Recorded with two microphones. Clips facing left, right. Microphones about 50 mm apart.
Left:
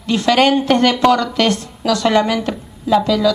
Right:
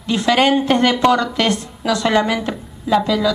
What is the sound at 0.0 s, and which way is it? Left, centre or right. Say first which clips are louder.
A woman's voice: left 2 dB; centre.